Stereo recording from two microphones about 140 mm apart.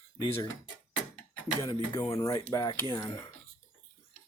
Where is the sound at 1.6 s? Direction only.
20° left (ahead or behind).